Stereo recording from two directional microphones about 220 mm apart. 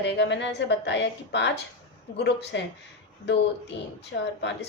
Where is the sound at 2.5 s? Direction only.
50° left (ahead or behind).